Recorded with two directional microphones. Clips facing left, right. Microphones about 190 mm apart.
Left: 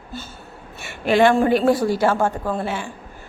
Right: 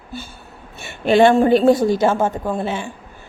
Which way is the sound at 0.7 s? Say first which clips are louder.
Right 3 dB; 25° right (ahead or behind).